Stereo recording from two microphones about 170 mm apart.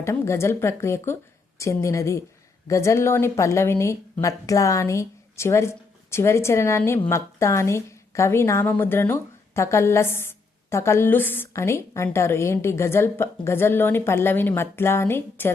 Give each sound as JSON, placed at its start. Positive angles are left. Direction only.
{"t": 0.0, "sound": "a woman's voice", "side_deg": 15}